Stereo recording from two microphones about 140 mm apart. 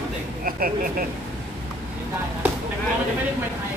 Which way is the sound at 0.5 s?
90° right.